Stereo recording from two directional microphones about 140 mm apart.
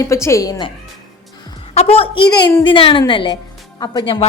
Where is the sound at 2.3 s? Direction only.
30° left (ahead or behind).